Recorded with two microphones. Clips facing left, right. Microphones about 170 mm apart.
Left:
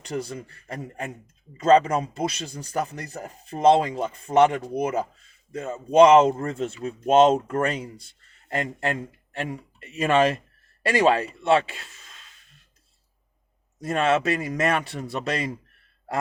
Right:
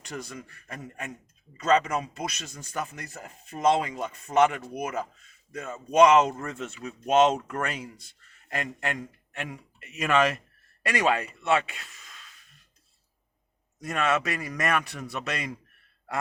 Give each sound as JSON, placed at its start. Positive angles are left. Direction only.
{"t": 0.0, "sound": "speech", "side_deg": 30}
{"t": 13.8, "sound": "speech", "side_deg": 30}